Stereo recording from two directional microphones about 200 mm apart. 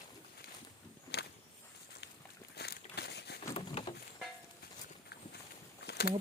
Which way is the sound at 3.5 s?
30° left (ahead or behind).